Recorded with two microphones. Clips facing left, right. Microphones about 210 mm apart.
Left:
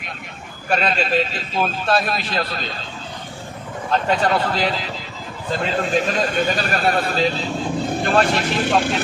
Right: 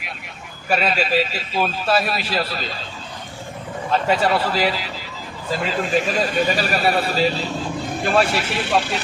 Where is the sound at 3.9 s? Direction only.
5° right (ahead or behind).